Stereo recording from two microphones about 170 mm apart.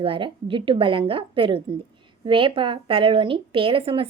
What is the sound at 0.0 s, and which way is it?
A woman's voice, 30° right (ahead or behind).